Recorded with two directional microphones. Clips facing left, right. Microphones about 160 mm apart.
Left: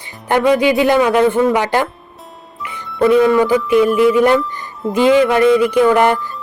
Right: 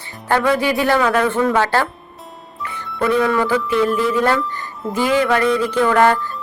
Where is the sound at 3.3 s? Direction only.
15° left (ahead or behind).